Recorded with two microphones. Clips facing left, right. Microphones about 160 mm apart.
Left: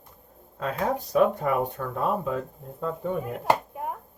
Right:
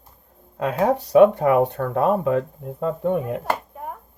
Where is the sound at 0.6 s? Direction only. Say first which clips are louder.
Right 7 dB; 80° right.